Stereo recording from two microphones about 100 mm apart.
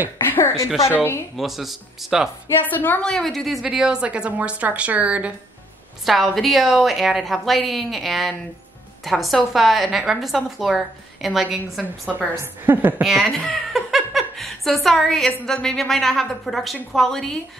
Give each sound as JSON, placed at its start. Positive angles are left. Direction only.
{"t": 0.2, "sound": "a sound", "side_deg": 25}
{"t": 0.7, "sound": "a woman's voice", "side_deg": 0}
{"t": 2.6, "sound": "a woman's voice", "side_deg": 15}
{"t": 3.1, "sound": "a woman's voice", "side_deg": 5}
{"t": 6.0, "sound": "a woman's voice", "side_deg": 0}
{"t": 12.4, "sound": "a woman's voice", "side_deg": -20}
{"t": 13.0, "sound": "a woman's voice", "side_deg": -5}
{"t": 13.7, "sound": "a sound", "side_deg": 0}
{"t": 15.4, "sound": "a woman's voice", "side_deg": 5}